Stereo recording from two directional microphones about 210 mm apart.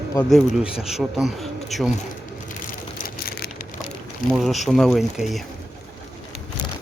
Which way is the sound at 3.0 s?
45° left (ahead or behind).